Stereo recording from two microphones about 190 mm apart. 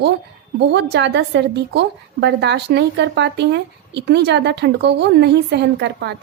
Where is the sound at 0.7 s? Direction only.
65° right (ahead or behind).